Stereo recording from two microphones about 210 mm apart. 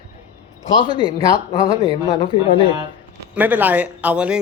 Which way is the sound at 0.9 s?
20° left (ahead or behind).